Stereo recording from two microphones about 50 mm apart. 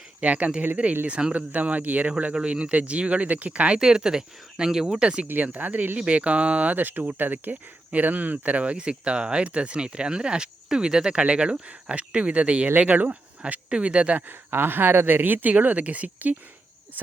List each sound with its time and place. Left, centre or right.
0.2 s speech: right
3.8 s speech: centre
5.3 s speech: right
6.1 s speech: right
14.3 s speech: right